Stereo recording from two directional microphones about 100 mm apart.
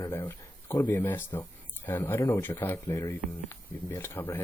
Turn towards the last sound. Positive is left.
turn(degrees=20)  # may be behind; listen again after turning